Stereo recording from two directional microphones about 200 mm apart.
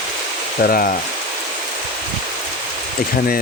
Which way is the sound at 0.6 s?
45° left (ahead or behind).